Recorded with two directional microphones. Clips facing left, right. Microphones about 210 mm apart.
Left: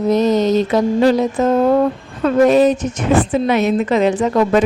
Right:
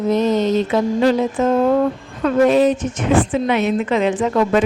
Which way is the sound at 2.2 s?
40° left (ahead or behind).